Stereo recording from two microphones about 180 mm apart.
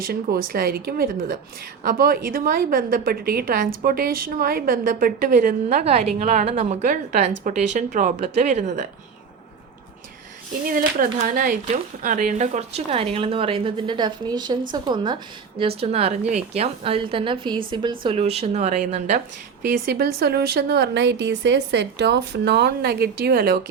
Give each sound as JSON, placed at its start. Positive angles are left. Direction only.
{"t": 0.0, "sound": "a woman's voice", "side_deg": -55}
{"t": 10.7, "sound": "a woman's voice", "side_deg": -50}
{"t": 19.8, "sound": "a woman's voice", "side_deg": -55}